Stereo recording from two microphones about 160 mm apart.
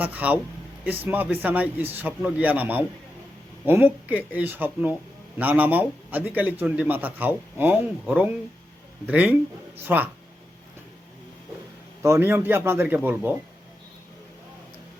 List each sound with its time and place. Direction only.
0.0 s speech: 10° right (ahead or behind)
12.0 s speech: 15° right (ahead or behind)